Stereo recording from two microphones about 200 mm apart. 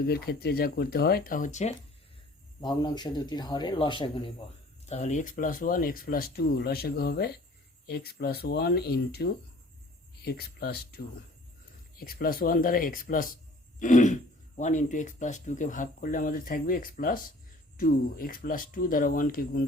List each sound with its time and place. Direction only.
0.1 s speech: 50° left (ahead or behind); by 1.7 s 35° left (ahead or behind)
2.6 s speech: 20° left (ahead or behind); by 13.3 s 45° left (ahead or behind)
13.7 s throat clearing: 40° left (ahead or behind)
14.6 s speech: 35° left (ahead or behind)